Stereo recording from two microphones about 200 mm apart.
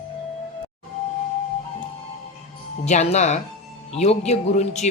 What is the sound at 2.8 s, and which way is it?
Speech, 35° left (ahead or behind).